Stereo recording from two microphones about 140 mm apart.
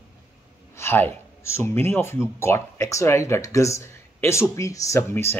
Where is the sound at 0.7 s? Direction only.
15° left (ahead or behind).